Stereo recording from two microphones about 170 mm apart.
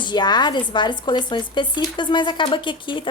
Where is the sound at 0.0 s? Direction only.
25° left (ahead or behind).